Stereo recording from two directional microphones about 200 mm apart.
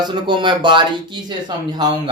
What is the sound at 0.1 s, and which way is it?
Speech, 25° right (ahead or behind).